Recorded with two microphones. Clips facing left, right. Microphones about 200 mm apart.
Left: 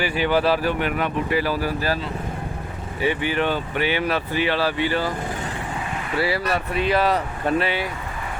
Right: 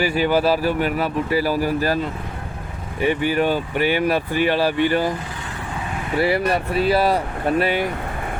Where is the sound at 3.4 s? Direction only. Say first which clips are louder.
Right 3 dB; 10° right (ahead or behind).